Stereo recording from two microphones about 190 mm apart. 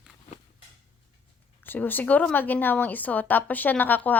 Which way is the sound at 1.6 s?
10° left (ahead or behind).